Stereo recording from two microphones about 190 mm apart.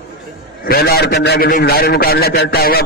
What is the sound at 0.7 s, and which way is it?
A man's voice, 55° left (ahead or behind).